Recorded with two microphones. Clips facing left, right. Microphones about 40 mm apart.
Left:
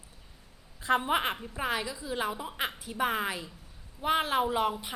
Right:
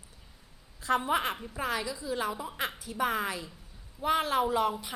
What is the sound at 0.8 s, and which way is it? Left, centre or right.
A woman's voice, centre.